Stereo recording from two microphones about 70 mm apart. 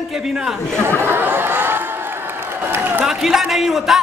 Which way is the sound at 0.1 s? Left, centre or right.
Centre.